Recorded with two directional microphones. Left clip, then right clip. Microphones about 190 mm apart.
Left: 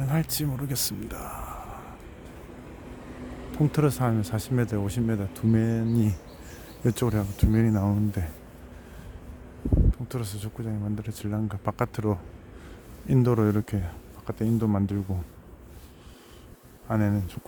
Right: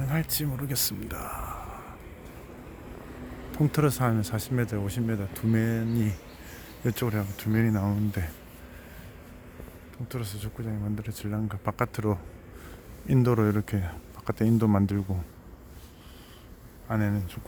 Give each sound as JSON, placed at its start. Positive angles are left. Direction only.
{"t": 0.0, "sound": "speech", "side_deg": 20}
{"t": 3.5, "sound": "speech", "side_deg": 15}
{"t": 10.1, "sound": "speech", "side_deg": 25}
{"t": 14.3, "sound": "speech", "side_deg": -5}
{"t": 16.9, "sound": "speech", "side_deg": 20}